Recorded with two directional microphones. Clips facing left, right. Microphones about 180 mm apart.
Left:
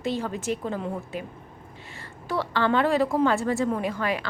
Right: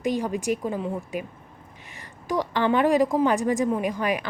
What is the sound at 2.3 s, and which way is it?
A woman's voice, 15° right (ahead or behind).